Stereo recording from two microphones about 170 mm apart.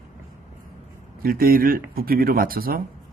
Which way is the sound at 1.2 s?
60° right (ahead or behind).